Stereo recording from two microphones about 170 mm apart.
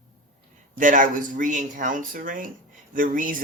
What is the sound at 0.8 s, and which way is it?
Speech, 50° right (ahead or behind).